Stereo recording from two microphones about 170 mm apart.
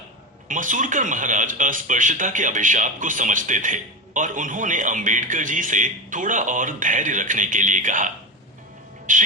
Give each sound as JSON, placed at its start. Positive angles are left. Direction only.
{"t": 0.4, "sound": "speech", "side_deg": -50}